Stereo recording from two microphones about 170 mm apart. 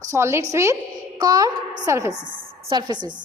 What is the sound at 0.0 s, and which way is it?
A woman's voice, 15° right (ahead or behind).